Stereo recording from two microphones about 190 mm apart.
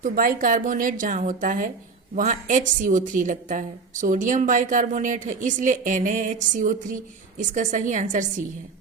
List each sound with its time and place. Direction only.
0.0 s a woman's voice: 45° right (ahead or behind)